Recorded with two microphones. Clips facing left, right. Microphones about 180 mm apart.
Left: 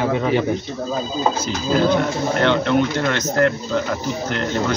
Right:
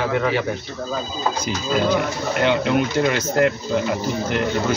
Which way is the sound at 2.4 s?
10° right (ahead or behind).